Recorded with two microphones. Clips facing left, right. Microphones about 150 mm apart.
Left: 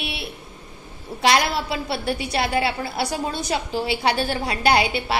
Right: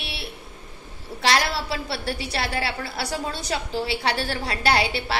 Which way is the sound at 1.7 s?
20° left (ahead or behind).